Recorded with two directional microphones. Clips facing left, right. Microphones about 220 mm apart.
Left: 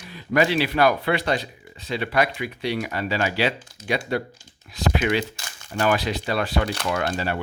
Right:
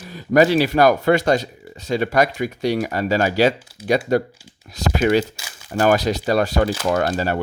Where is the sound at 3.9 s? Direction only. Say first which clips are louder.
Right 7 dB; 40° right (ahead or behind).